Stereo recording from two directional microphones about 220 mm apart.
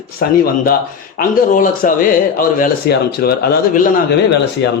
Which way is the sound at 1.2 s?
40° left (ahead or behind).